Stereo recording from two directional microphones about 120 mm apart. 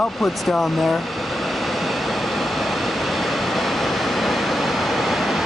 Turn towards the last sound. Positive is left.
turn(degrees=0)  # may be behind; listen again after turning